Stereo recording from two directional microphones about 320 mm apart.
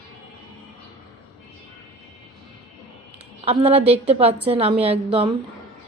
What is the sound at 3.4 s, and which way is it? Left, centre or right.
A woman's voice, centre.